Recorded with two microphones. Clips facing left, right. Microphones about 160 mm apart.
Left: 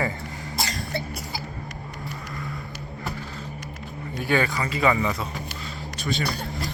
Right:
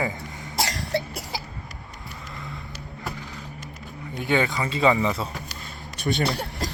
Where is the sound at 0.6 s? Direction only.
75° right (ahead or behind).